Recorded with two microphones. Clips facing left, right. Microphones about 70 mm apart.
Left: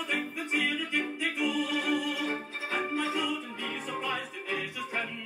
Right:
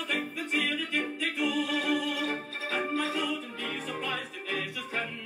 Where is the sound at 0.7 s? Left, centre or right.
Left.